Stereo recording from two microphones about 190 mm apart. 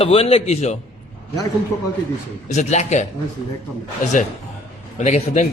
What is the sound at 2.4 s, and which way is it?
A man's voice, 40° left (ahead or behind).